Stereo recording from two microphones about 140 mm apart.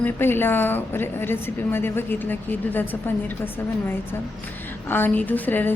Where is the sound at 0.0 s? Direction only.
15° left (ahead or behind).